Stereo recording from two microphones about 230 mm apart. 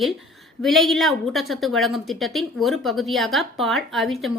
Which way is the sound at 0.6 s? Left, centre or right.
Centre.